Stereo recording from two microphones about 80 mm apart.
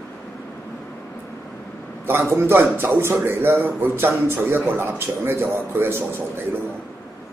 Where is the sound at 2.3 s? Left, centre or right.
Right.